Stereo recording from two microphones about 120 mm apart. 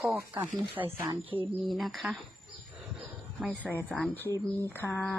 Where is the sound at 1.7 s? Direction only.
Centre (ahead or behind).